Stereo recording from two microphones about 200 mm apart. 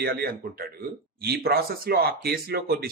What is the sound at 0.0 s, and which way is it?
Speech, 50° right (ahead or behind).